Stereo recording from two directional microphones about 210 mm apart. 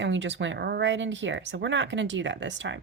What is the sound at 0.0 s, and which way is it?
A woman's voice, 60° right (ahead or behind).